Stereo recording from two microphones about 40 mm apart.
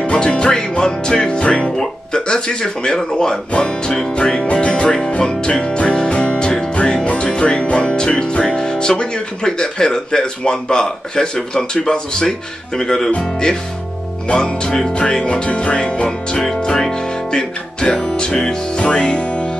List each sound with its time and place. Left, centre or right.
0.0 s speech: left
4.6 s music: left
7.2 s speech: left
16.6 s music: centre